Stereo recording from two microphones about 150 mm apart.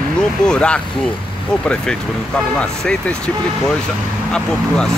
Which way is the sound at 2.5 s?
5° left (ahead or behind).